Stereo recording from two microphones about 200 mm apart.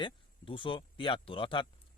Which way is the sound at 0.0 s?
25° left (ahead or behind).